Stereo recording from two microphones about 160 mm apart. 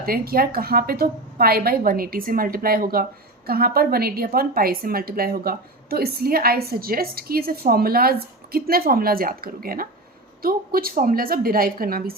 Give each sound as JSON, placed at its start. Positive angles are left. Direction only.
{"t": 0.0, "sound": "a woman's voice", "side_deg": -65}